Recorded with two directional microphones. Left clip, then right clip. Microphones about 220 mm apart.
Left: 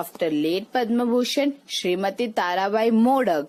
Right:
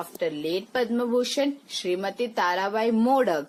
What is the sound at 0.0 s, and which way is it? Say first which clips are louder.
Speech: left 5 dB; 40° left (ahead or behind).